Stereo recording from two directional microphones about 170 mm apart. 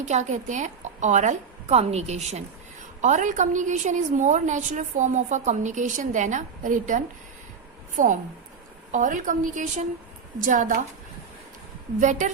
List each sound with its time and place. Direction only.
0.0 s a woman's voice: 45° right (ahead or behind)
11.9 s a woman's voice: 45° right (ahead or behind)